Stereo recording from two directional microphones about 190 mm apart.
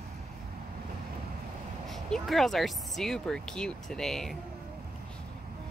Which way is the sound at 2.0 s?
Centre (ahead or behind).